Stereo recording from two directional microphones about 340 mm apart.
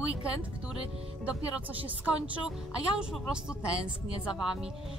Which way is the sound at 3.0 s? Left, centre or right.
Centre.